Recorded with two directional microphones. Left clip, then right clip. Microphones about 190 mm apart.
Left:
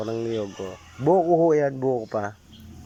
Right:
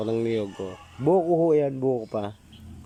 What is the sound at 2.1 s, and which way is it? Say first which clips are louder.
Speech: left 2 dB; 15° right (ahead or behind).